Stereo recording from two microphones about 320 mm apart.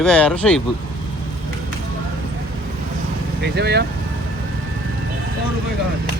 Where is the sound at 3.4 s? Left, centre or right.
Right.